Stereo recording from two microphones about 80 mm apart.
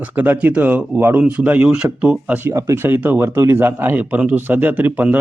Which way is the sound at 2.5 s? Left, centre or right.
Right.